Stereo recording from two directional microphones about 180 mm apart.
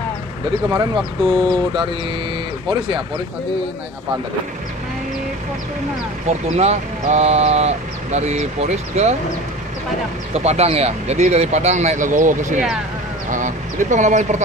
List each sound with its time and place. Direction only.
0.7 s speech: 20° right (ahead or behind)
6.2 s speech: 35° right (ahead or behind)
10.3 s speech: 35° right (ahead or behind)